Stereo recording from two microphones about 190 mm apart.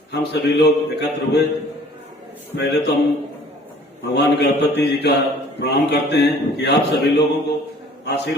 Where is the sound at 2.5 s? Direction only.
60° left (ahead or behind).